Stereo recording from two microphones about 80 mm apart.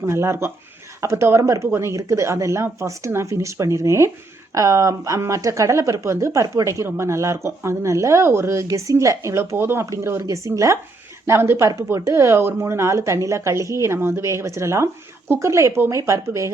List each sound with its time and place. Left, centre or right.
0.0 s speech: right